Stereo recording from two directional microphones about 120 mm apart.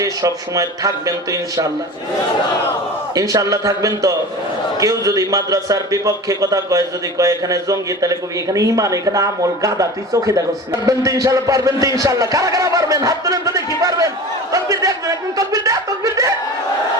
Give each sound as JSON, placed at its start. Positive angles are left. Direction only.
{"t": 0.0, "sound": "a man's voice", "side_deg": -30}
{"t": 3.2, "sound": "a man's voice", "side_deg": -30}
{"t": 14.5, "sound": "chuckle", "side_deg": -30}